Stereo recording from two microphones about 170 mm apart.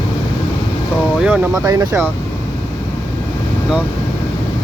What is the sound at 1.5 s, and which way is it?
Speech, 20° right (ahead or behind).